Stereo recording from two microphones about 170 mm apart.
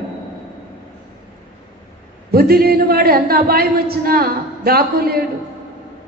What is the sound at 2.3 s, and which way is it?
A woman's voice, 65° right (ahead or behind).